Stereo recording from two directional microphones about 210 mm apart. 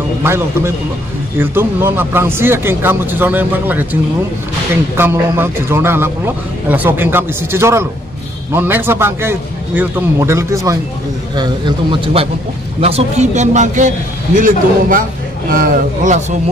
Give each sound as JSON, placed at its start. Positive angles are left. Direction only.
{"t": 0.2, "sound": "a man's voice", "side_deg": -10}